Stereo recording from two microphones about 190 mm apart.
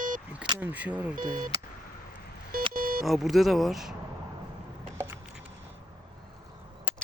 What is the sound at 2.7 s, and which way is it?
Music, 50° right (ahead or behind).